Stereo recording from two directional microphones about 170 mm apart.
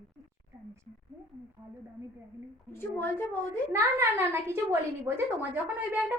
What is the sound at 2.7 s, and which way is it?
Speech, 15° left (ahead or behind).